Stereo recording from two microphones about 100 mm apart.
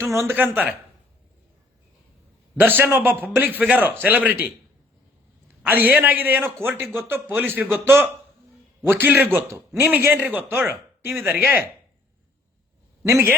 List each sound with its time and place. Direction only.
0.0 s a man's voice: 30° right (ahead or behind)
0.3 s a man's voice: 20° right (ahead or behind)
2.6 s a man's voice: 20° right (ahead or behind)
5.6 s a man's voice: 20° right (ahead or behind)
13.1 s a man's voice: 25° right (ahead or behind)